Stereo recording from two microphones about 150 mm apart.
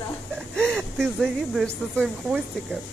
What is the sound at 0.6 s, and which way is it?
Speech, 5° left (ahead or behind).